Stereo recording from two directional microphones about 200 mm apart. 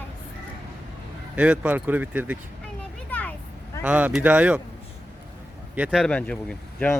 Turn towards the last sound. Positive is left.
turn(degrees=5)  # may be behind; listen again after turning